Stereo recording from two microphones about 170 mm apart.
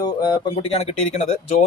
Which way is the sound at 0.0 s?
25° left (ahead or behind).